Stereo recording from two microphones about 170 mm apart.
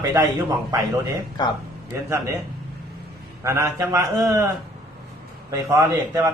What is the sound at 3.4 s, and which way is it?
A man's voice, 15° right (ahead or behind).